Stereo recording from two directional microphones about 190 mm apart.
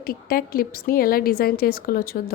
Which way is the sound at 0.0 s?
50° left (ahead or behind).